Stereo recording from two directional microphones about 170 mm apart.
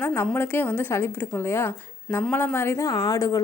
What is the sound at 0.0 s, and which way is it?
A woman's voice, 15° left (ahead or behind).